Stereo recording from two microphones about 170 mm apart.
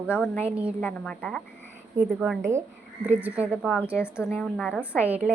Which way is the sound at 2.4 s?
15° right (ahead or behind).